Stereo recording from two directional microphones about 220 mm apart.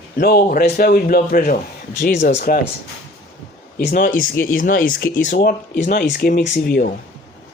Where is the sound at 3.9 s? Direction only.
35° left (ahead or behind).